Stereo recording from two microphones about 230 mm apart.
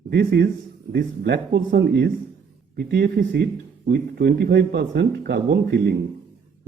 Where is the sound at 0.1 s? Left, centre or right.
Right.